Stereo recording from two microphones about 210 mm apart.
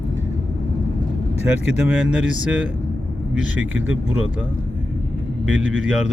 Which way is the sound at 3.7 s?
70° right (ahead or behind).